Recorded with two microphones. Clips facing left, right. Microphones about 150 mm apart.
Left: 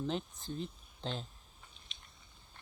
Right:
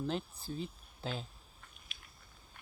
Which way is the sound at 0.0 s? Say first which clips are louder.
Even; centre (ahead or behind).